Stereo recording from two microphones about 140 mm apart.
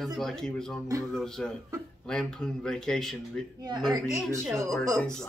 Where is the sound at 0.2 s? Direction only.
5° left (ahead or behind).